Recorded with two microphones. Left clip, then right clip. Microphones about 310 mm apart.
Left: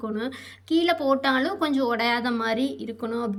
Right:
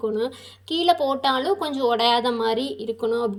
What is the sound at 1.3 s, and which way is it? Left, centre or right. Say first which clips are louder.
Speech: right 2 dB; centre.